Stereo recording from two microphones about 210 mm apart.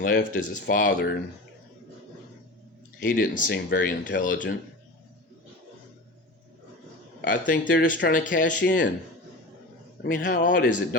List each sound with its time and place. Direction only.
0.0 s speech: 40° left (ahead or behind)
3.0 s speech: 40° left (ahead or behind)
7.3 s speech: 40° left (ahead or behind)
10.0 s speech: 45° left (ahead or behind)